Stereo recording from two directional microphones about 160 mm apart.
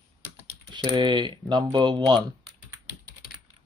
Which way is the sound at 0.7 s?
30° right (ahead or behind).